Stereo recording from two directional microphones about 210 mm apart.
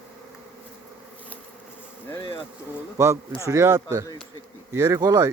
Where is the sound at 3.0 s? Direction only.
15° right (ahead or behind).